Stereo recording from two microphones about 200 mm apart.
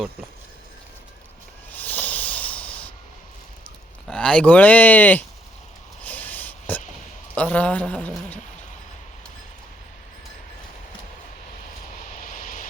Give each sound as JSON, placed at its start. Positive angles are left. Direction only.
{"t": 1.7, "sound": "rub", "side_deg": 10}
{"t": 4.1, "sound": "speech", "side_deg": 5}
{"t": 6.0, "sound": "a sound", "side_deg": 10}
{"t": 7.3, "sound": "speech", "side_deg": 5}
{"t": 12.2, "sound": "vehicle", "side_deg": 45}